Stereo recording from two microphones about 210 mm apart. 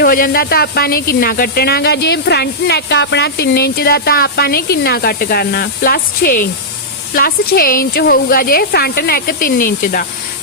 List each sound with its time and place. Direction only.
0.0 s speech: 45° left (ahead or behind)